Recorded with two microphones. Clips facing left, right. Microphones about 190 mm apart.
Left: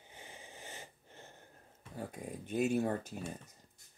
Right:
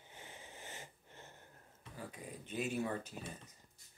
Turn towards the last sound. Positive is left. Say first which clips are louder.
# left 5 dB
turn(degrees=45)  # may be behind; listen again after turning